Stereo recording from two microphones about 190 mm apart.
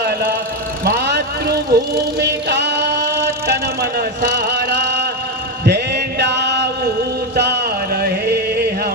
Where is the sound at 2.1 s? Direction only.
60° right (ahead or behind).